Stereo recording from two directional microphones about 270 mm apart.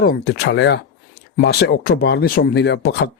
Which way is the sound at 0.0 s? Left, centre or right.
Left.